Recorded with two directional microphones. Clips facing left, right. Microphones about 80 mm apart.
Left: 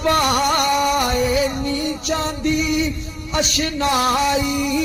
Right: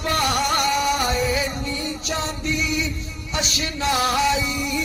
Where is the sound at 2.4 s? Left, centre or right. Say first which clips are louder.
Left 7 dB; left.